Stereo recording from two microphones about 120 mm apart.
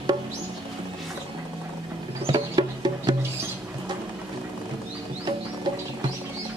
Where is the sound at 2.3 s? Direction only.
35° right (ahead or behind).